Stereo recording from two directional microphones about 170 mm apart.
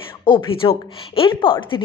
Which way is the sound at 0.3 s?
30° left (ahead or behind).